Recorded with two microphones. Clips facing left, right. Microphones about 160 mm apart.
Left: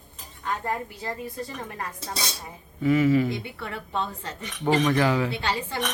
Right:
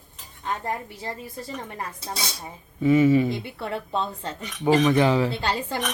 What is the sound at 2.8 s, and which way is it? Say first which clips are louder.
Speech: right 3 dB; 20° right (ahead or behind).